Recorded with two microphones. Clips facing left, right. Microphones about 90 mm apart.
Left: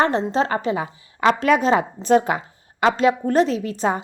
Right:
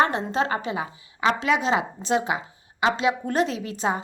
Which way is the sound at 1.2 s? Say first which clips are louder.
Left 5 dB; 55° left (ahead or behind).